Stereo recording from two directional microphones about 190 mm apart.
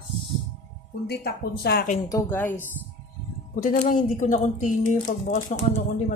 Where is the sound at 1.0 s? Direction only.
55° left (ahead or behind).